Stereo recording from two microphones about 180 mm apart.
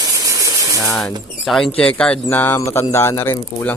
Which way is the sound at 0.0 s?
20° right (ahead or behind).